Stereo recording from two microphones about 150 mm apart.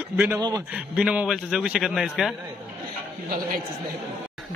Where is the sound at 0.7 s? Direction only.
5° right (ahead or behind).